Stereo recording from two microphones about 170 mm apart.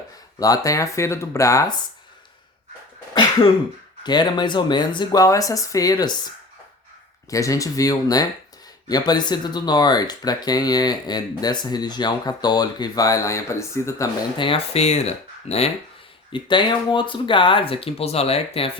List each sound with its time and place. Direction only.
0.3 s speech: 20° left (ahead or behind)
4.0 s speech: 25° left (ahead or behind)
7.3 s speech: 20° left (ahead or behind)
14.3 s speech: 30° left (ahead or behind)